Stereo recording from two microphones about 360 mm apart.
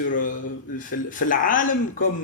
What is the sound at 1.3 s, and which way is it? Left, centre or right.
Speech, left.